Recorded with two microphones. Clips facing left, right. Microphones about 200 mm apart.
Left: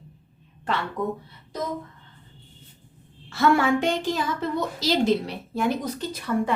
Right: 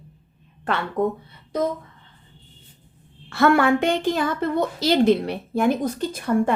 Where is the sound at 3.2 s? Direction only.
60° right (ahead or behind).